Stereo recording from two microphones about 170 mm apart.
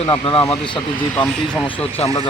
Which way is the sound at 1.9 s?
35° left (ahead or behind).